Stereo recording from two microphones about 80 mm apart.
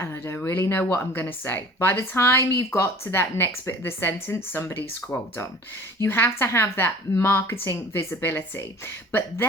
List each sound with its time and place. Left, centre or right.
0.0 s speech: left